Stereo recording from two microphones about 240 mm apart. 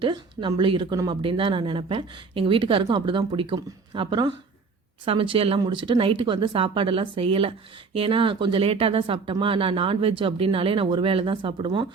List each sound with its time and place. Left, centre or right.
0.0 s speech: centre